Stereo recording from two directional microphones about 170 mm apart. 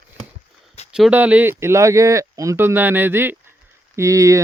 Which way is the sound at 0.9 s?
5° right (ahead or behind).